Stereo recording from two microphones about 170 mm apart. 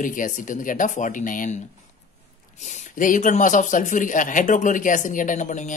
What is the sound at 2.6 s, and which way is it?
Speech, 50° left (ahead or behind).